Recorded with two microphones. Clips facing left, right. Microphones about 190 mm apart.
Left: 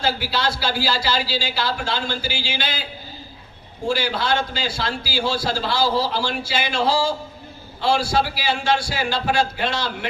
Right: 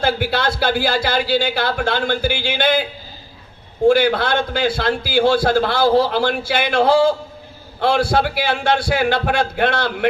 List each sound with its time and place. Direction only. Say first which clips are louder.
0.0 s a man's voice: right 4 dB; 55° right (ahead or behind)
3.8 s a man's voice: right 8 dB; 55° right (ahead or behind)